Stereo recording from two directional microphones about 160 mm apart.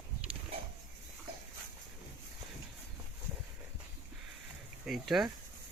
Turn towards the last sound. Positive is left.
turn(degrees=0)  # may be behind; listen again after turning